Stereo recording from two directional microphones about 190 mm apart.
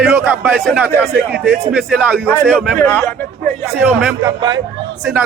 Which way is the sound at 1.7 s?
5° right (ahead or behind).